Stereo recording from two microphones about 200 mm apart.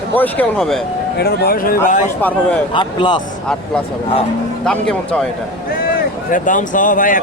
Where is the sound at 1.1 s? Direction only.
50° left (ahead or behind).